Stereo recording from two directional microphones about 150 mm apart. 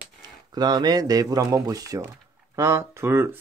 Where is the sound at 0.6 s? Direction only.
25° right (ahead or behind).